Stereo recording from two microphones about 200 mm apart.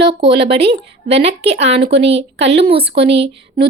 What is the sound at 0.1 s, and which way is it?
A woman's voice, 25° right (ahead or behind).